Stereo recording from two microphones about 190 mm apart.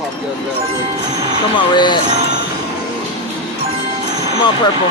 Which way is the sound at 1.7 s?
25° left (ahead or behind).